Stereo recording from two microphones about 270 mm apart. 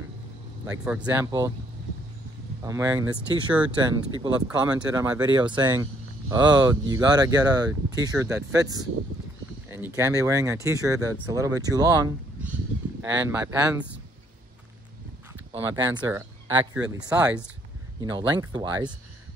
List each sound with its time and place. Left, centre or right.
0.7 s speech: centre
2.6 s speech: centre
15.6 s speech: centre
18.1 s speech: centre